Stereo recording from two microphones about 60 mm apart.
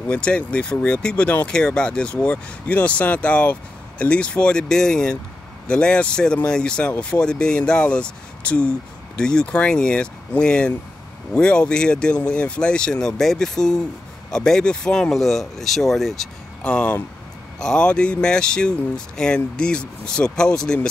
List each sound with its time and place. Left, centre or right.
0.1 s speech: centre
16.6 s speech: centre